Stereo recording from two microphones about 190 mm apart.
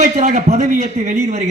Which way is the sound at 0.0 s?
35° right (ahead or behind).